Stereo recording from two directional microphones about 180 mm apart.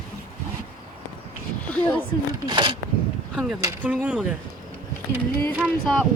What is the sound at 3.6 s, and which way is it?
Speech, 10° right (ahead or behind).